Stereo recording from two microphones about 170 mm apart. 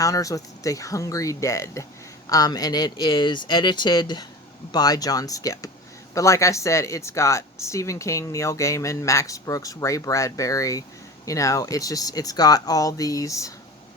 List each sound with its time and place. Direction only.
0.0 s speech: 20° left (ahead or behind)